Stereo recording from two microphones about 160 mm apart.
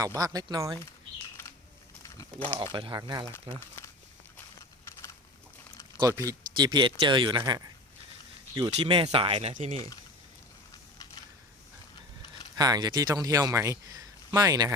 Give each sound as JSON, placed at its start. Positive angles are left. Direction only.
{"t": 0.0, "sound": "speech", "side_deg": -20}
{"t": 2.7, "sound": "speech", "side_deg": -30}
{"t": 3.5, "sound": "speech", "side_deg": 15}
{"t": 6.0, "sound": "speech", "side_deg": -20}
{"t": 10.9, "sound": "typing", "side_deg": 25}
{"t": 12.5, "sound": "speech", "side_deg": -25}